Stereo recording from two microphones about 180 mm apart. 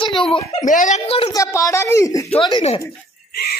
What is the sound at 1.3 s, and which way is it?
Speech, 15° left (ahead or behind).